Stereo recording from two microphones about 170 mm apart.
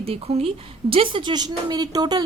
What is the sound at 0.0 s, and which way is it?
A woman's voice, 35° right (ahead or behind).